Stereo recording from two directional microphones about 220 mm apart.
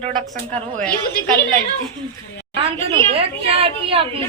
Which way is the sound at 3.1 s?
25° right (ahead or behind).